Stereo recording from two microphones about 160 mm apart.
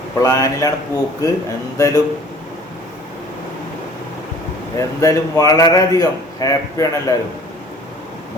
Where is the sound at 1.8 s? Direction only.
20° left (ahead or behind).